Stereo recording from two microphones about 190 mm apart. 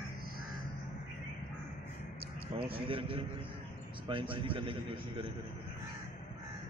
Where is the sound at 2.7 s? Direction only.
30° right (ahead or behind).